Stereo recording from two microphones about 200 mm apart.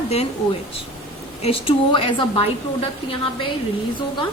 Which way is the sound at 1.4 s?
30° left (ahead or behind).